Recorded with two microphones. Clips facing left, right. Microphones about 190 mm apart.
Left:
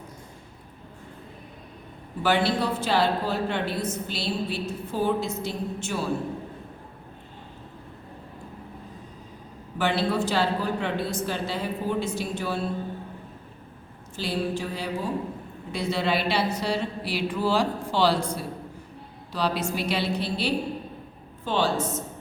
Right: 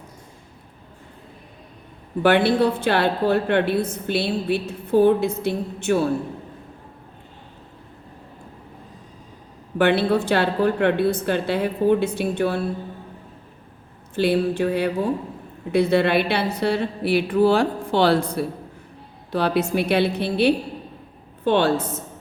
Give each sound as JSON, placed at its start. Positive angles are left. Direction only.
{"t": 2.2, "sound": "a woman's voice", "side_deg": -60}
{"t": 9.7, "sound": "a woman's voice", "side_deg": -60}
{"t": 14.2, "sound": "a woman's voice", "side_deg": -60}